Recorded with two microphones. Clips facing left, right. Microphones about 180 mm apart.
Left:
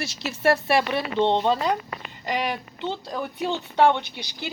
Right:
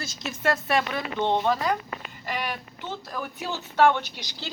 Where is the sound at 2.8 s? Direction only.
25° left (ahead or behind).